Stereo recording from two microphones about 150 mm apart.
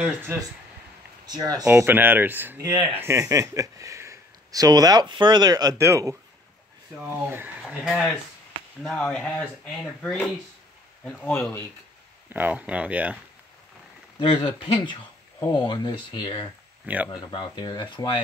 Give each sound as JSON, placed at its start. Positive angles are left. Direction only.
{"t": 0.3, "sound": "speech", "side_deg": -15}
{"t": 1.7, "sound": "speech", "side_deg": -15}
{"t": 2.6, "sound": "speech", "side_deg": -30}
{"t": 3.0, "sound": "speech", "side_deg": -20}
{"t": 7.2, "sound": "speech", "side_deg": -15}
{"t": 7.6, "sound": "speech", "side_deg": 5}
{"t": 12.3, "sound": "speech", "side_deg": -10}
{"t": 14.4, "sound": "speech", "side_deg": 30}
{"t": 16.8, "sound": "speech", "side_deg": -10}
{"t": 17.1, "sound": "speech", "side_deg": 30}